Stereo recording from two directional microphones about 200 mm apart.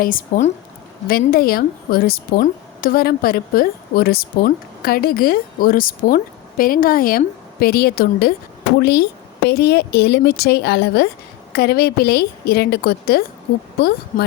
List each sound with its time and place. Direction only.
0.0 s a woman's voice: 40° left (ahead or behind)